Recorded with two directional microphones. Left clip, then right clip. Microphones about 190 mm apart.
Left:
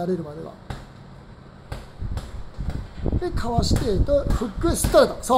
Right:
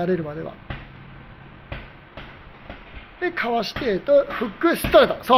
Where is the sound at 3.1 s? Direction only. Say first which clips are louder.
Right 4 dB; 10° right (ahead or behind).